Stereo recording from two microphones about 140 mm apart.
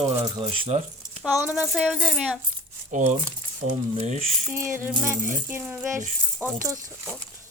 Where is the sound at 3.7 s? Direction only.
50° right (ahead or behind).